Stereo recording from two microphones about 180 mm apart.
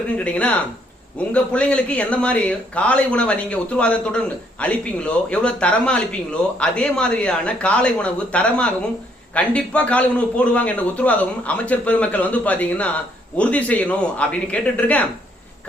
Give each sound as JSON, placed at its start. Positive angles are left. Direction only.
{"t": 0.3, "sound": "a man's voice", "side_deg": 5}